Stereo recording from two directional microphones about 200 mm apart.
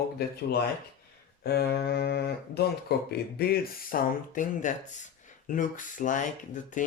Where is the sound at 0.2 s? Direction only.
55° left (ahead or behind).